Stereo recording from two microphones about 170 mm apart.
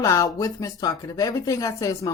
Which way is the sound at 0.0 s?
20° left (ahead or behind).